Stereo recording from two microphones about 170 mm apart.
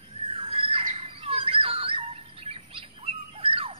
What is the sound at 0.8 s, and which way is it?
Bird, 35° right (ahead or behind).